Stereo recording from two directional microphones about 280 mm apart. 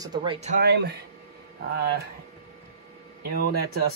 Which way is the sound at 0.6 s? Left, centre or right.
Right.